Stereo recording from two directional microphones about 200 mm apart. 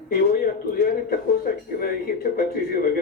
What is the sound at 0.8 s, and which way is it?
A man's voice, 45° left (ahead or behind).